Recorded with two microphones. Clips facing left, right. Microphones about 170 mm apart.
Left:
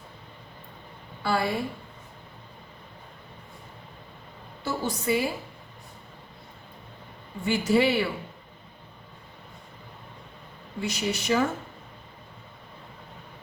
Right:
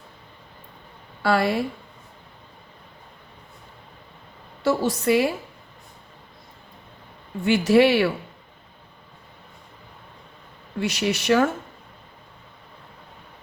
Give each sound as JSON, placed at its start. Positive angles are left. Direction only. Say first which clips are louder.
{"t": 1.2, "sound": "speech", "louder": "right 5 dB", "side_deg": -70}
{"t": 4.6, "sound": "speech", "louder": "right 8 dB", "side_deg": -75}
{"t": 7.4, "sound": "speech", "louder": "right 6 dB", "side_deg": -75}
{"t": 10.8, "sound": "speech", "louder": "right 5 dB", "side_deg": -75}